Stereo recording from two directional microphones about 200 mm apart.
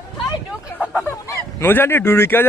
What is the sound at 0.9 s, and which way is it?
Speech, 10° left (ahead or behind).